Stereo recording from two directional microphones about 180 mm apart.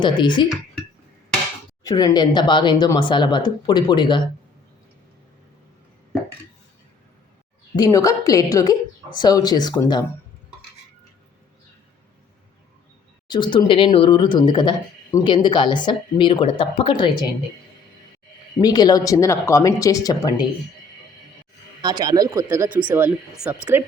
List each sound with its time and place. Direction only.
0.0 s speech: 25° left (ahead or behind)
1.8 s speech: 20° left (ahead or behind)
7.8 s speech: 20° left (ahead or behind)
13.2 s speech: 25° left (ahead or behind)
18.6 s speech: 20° left (ahead or behind)
21.8 s speech: 20° right (ahead or behind)